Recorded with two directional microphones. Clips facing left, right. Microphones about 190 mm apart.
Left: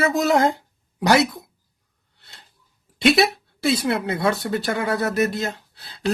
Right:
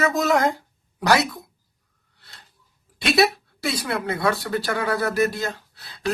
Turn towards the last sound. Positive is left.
turn(degrees=25)  # may be behind; listen again after turning